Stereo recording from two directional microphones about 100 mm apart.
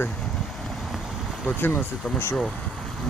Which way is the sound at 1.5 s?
20° left (ahead or behind).